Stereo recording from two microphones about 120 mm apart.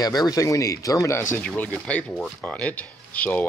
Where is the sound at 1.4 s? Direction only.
10° left (ahead or behind).